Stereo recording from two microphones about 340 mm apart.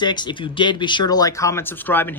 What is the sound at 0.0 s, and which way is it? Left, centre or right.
Speech, centre.